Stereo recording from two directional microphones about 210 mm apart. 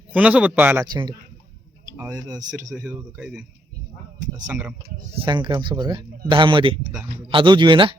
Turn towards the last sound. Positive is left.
turn(degrees=-25)  # may be behind; listen again after turning